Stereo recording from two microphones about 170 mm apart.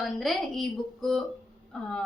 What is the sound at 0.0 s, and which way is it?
A woman's voice, centre (ahead or behind).